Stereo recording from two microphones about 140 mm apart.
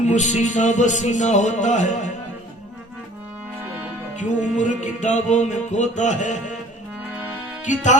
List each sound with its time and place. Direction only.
0.0 s music: 60° left (ahead or behind)
4.2 s music: 60° left (ahead or behind)
7.6 s music: 60° left (ahead or behind)